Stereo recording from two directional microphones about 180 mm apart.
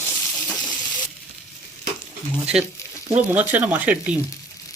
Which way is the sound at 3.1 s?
10° right (ahead or behind).